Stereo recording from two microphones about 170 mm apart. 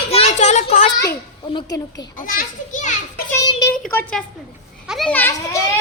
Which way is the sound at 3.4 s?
25° left (ahead or behind).